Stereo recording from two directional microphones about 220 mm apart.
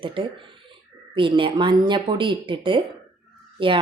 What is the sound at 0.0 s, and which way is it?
A woman's voice, 25° right (ahead or behind).